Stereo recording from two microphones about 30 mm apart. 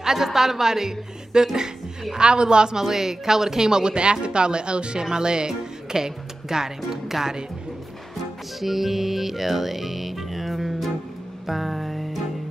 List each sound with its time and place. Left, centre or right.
0.0 s a woman's voice: centre
2.1 s speech: right
2.8 s speech: centre
8.5 s music: centre